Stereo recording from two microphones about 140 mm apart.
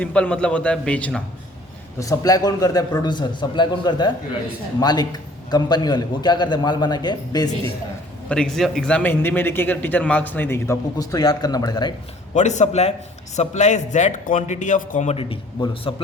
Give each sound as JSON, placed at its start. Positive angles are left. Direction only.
{"t": 0.0, "sound": "a man's voice", "side_deg": 10}
{"t": 2.0, "sound": "a man's voice", "side_deg": 25}
{"t": 8.3, "sound": "a man's voice", "side_deg": 5}
{"t": 10.9, "sound": "a man's voice", "side_deg": 30}
{"t": 12.3, "sound": "a man's voice", "side_deg": 60}
{"t": 15.1, "sound": "a man's voice", "side_deg": 40}